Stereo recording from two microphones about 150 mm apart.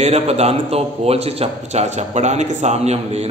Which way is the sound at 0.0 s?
45° right (ahead or behind).